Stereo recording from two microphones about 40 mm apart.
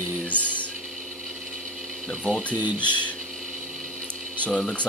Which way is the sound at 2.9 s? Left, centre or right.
Left.